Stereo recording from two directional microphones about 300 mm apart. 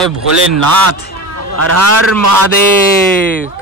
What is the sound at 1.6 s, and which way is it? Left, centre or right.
Speech, right.